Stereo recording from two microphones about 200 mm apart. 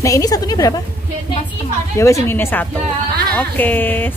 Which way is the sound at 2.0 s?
15° left (ahead or behind).